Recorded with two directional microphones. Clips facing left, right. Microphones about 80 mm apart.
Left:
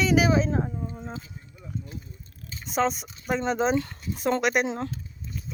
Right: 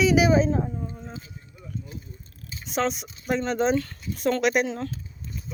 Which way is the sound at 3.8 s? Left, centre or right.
Left.